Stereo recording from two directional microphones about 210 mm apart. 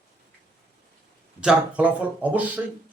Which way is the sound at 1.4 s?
5° right (ahead or behind).